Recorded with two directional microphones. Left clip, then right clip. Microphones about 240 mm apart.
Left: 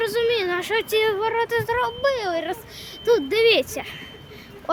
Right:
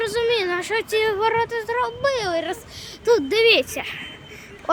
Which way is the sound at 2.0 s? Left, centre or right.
Centre.